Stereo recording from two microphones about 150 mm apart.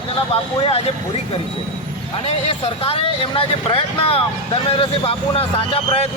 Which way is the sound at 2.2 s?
40° left (ahead or behind).